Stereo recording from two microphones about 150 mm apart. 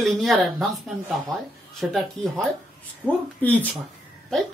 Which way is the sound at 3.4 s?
10° left (ahead or behind).